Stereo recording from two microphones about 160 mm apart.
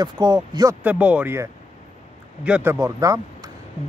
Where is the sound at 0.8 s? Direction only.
10° right (ahead or behind).